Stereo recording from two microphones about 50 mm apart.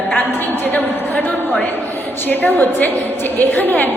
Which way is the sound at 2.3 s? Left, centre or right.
Left.